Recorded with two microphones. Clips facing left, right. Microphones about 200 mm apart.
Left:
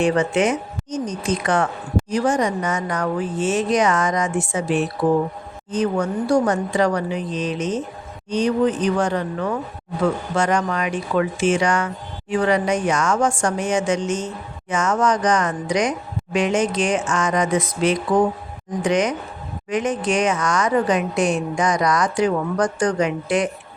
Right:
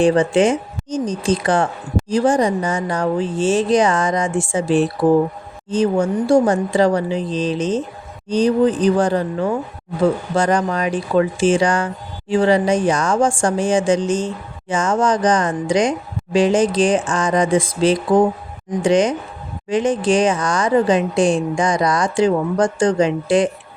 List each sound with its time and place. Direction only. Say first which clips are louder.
0.0 s speech: right 4 dB; 30° right (ahead or behind)